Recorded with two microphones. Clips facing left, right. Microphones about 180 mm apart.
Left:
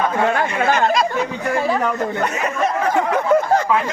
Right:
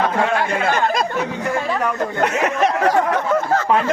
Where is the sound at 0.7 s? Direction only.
55° right (ahead or behind).